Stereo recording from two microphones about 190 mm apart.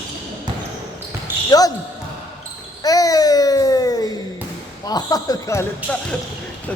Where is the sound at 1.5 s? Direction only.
20° left (ahead or behind).